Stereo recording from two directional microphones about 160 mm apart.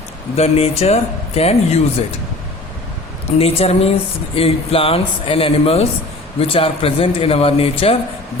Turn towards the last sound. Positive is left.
turn(degrees=35)  # may be behind; listen again after turning